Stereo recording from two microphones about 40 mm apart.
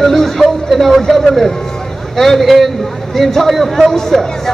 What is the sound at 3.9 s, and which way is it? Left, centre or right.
Speech, centre.